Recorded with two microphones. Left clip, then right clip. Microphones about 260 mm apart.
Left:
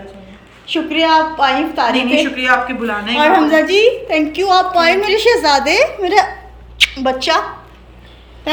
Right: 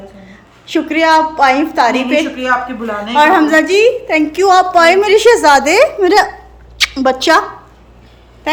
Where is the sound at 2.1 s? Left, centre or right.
Right.